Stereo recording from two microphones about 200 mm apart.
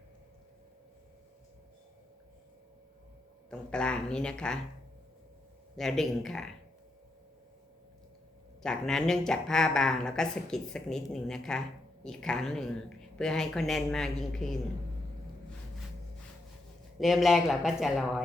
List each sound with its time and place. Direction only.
3.5 s speech: 5° left (ahead or behind)
5.7 s speech: centre (ahead or behind)
8.6 s speech: 5° left (ahead or behind)
17.0 s speech: centre (ahead or behind)